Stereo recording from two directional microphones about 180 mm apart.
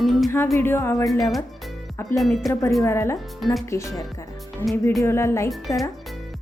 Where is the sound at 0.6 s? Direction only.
15° left (ahead or behind).